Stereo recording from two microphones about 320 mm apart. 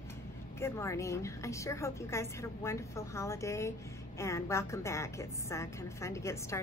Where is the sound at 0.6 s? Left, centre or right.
Centre.